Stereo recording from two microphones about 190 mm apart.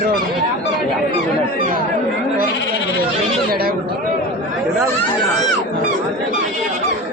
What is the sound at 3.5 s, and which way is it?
Speech, 50° right (ahead or behind).